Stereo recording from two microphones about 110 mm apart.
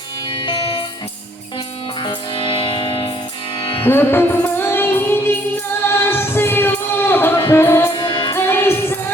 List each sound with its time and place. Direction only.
0.4 s music: 40° left (ahead or behind)
2.0 s music: 50° left (ahead or behind)
3.8 s music: 20° left (ahead or behind)
7.9 s music: 45° left (ahead or behind)
8.3 s music: 25° left (ahead or behind)